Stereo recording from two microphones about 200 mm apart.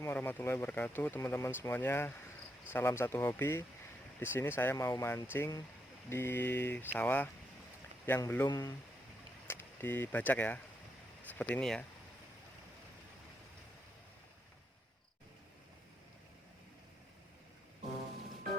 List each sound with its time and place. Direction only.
0.0 s speech: 10° left (ahead or behind)